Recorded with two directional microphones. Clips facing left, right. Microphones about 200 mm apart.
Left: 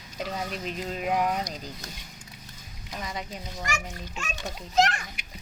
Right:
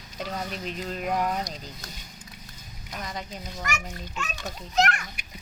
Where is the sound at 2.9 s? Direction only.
5° left (ahead or behind).